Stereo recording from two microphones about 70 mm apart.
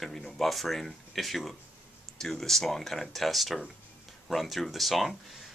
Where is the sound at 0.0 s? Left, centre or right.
Centre.